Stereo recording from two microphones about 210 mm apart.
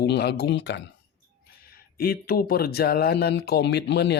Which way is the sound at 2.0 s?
45° left (ahead or behind).